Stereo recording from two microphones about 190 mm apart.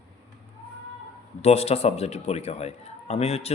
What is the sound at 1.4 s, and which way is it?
A man's voice, 35° left (ahead or behind).